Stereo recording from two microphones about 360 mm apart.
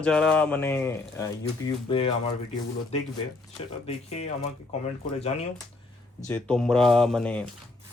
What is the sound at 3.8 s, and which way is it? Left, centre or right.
Speech, centre.